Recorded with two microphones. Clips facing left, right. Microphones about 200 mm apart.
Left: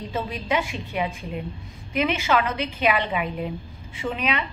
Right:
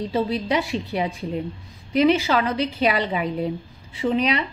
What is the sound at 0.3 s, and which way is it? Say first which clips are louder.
A woman's voice: right 3 dB; 35° right (ahead or behind).